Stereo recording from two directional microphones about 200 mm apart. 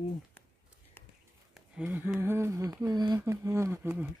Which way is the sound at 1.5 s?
5° right (ahead or behind).